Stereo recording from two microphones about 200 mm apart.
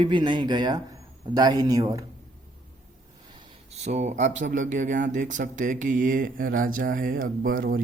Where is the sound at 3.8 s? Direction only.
35° right (ahead or behind).